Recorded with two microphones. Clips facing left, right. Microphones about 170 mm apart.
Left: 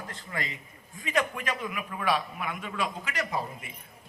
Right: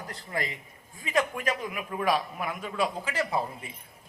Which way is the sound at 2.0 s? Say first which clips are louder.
Right 2 dB; 40° right (ahead or behind).